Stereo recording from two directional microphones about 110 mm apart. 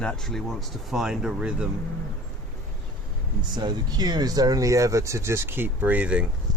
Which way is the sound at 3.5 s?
40° right (ahead or behind).